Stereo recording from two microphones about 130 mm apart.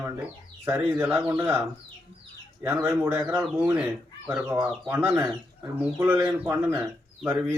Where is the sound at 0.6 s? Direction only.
20° right (ahead or behind).